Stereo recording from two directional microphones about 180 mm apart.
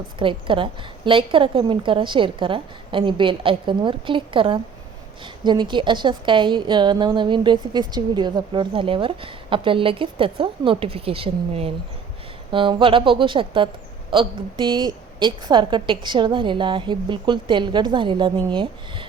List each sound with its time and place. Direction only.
0.2 s a woman's voice: 30° right (ahead or behind)